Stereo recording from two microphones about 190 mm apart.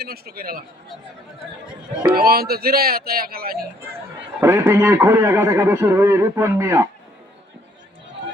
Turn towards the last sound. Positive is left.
turn(degrees=-15)  # may be behind; listen again after turning